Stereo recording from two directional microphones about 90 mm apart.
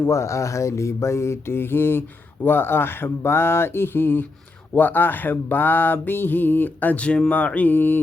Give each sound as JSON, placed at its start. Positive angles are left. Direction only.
{"t": 0.0, "sound": "mantra", "side_deg": 35}